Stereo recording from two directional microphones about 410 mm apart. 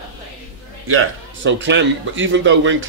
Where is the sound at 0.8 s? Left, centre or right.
Right.